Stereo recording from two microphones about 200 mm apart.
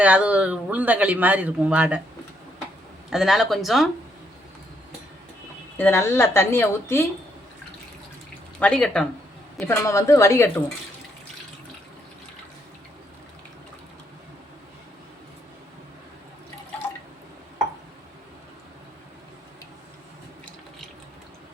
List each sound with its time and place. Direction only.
0.0 s speech: 5° right (ahead or behind)
3.1 s speech: centre (ahead or behind)
5.7 s speech: 10° left (ahead or behind)
8.5 s speech: 5° left (ahead or behind)